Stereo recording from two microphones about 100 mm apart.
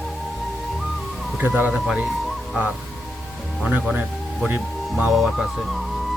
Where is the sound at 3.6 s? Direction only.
10° right (ahead or behind).